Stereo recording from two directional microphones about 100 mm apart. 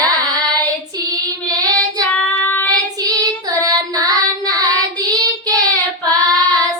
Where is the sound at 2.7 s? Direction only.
40° right (ahead or behind).